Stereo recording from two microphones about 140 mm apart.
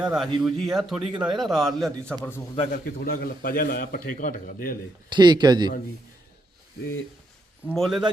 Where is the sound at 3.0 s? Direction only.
90° left.